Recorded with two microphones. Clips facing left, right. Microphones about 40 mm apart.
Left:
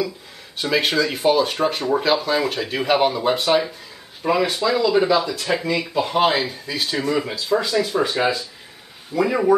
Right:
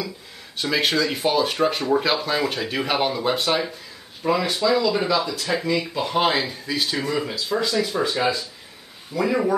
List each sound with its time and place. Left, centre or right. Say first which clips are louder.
0.6 s speech: left 2 dB; centre
5.9 s speech: left 5 dB; centre
7.2 s speech: left 3 dB; centre
9.1 s speech: left 3 dB; centre